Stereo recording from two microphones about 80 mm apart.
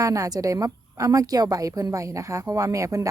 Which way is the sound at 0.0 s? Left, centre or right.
Right.